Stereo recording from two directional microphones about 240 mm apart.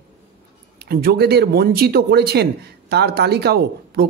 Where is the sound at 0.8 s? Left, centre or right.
Right.